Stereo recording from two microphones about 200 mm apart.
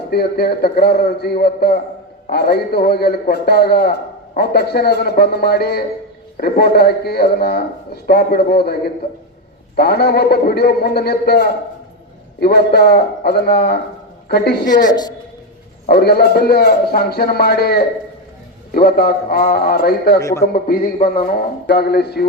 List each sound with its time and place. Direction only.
0.1 s a man's voice: 50° left (ahead or behind)
14.8 s a woman's voice: 20° left (ahead or behind)
15.9 s a man's voice: 55° left (ahead or behind)